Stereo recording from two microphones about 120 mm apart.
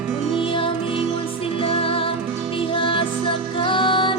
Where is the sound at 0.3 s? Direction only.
50° left (ahead or behind).